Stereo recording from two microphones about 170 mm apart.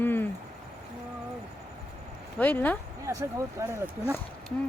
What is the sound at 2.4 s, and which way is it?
Speech, 10° left (ahead or behind).